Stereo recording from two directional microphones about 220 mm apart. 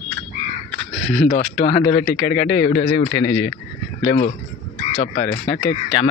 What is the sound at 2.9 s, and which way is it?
Speech, 50° left (ahead or behind).